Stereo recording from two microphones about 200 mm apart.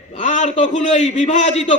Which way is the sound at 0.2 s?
35° left (ahead or behind).